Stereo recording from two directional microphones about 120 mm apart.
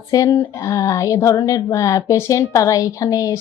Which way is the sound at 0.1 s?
30° left (ahead or behind).